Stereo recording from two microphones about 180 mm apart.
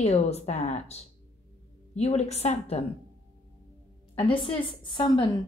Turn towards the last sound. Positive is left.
turn(degrees=25)  # may be behind; listen again after turning